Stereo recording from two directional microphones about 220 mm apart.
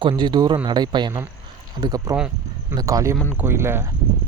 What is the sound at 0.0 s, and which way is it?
Speech, 20° right (ahead or behind).